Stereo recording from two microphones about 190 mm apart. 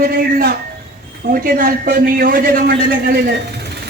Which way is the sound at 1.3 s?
50° right (ahead or behind).